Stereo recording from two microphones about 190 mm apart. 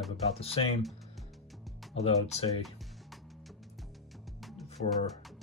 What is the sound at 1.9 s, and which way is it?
Speech, 35° left (ahead or behind).